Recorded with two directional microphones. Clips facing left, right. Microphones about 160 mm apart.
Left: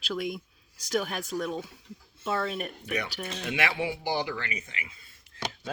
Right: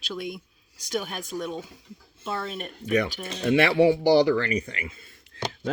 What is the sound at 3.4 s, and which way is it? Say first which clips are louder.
Speech: right 12 dB; 40° right (ahead or behind).